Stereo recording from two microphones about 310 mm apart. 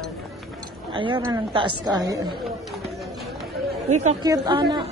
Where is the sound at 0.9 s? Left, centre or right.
Centre.